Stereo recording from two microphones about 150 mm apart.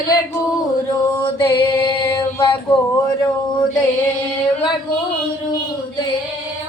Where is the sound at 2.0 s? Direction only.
30° left (ahead or behind).